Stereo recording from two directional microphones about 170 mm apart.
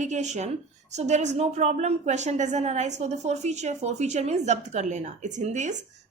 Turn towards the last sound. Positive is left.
turn(degrees=-45)  # may be behind; listen again after turning